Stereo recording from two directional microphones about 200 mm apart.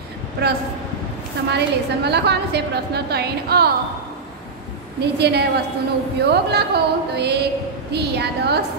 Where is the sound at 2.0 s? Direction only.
55° right (ahead or behind).